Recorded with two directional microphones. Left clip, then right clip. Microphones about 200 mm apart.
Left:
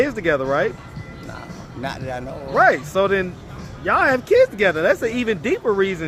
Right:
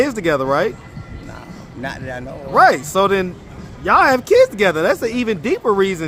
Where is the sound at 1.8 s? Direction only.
5° right (ahead or behind).